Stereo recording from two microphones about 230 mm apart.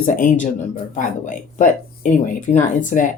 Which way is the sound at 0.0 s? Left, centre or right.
Left.